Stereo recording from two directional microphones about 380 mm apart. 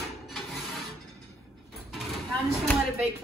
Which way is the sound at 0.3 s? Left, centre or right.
Centre.